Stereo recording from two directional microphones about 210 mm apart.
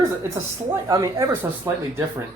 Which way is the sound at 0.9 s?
15° right (ahead or behind).